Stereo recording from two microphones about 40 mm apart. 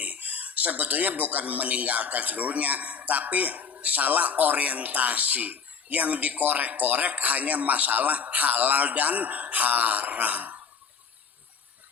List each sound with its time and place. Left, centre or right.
0.0 s speech: right